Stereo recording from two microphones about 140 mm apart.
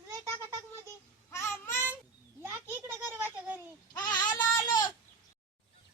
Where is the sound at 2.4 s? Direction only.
20° right (ahead or behind).